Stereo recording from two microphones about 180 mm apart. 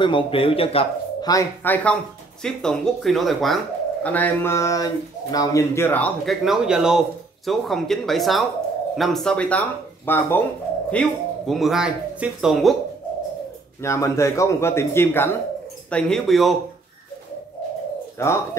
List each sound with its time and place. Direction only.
0.0 s speech: 30° left (ahead or behind)
1.3 s speech: 10° left (ahead or behind)
13.8 s speech: 15° left (ahead or behind); by 16.5 s centre (ahead or behind)
18.2 s speech: 15° left (ahead or behind)